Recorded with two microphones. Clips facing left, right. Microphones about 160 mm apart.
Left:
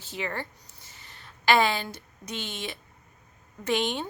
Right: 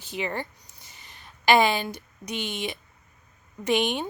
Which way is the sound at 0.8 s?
15° right (ahead or behind).